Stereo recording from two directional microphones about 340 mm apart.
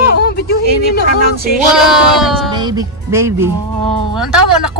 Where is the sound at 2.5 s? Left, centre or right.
Centre.